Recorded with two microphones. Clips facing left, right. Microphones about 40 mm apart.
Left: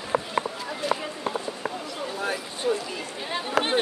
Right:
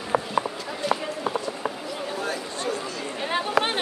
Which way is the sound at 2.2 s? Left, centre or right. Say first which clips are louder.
Even; centre.